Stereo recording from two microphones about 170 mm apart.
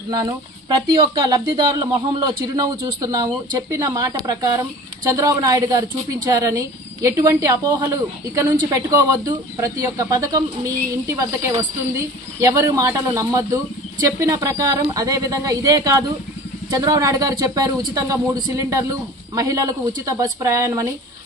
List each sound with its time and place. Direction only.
0.1 s a woman's voice: 25° right (ahead or behind)